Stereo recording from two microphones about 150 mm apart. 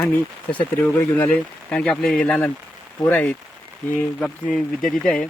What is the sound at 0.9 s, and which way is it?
Speech, 15° left (ahead or behind).